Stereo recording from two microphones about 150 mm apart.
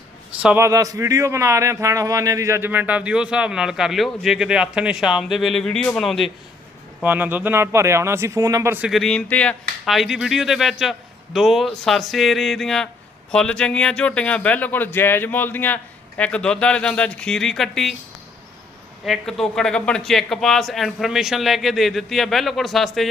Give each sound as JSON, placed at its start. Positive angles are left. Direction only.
{"t": 0.4, "sound": "speech", "side_deg": -15}
{"t": 7.0, "sound": "speech", "side_deg": -10}
{"t": 8.9, "sound": "a man's voice", "side_deg": 0}
{"t": 19.0, "sound": "a man's voice", "side_deg": 0}